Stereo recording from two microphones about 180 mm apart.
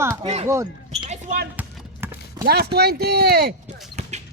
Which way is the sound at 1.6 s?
10° right (ahead or behind).